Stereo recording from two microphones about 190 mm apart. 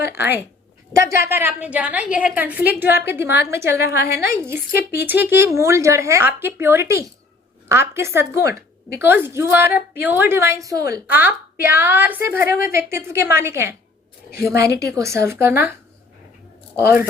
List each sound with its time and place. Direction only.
0.1 s a woman's voice: 10° right (ahead or behind)
4.4 s a woman's voice: 15° right (ahead or behind)
14.3 s a woman's voice: 55° left (ahead or behind)
14.9 s a woman's voice: 15° right (ahead or behind)
16.7 s a woman's voice: 15° right (ahead or behind)